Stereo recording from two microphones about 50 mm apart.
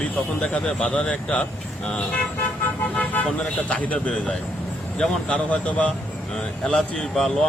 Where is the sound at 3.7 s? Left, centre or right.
Left.